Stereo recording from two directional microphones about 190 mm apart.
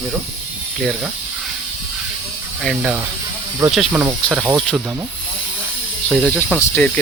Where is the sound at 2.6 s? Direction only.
5° right (ahead or behind).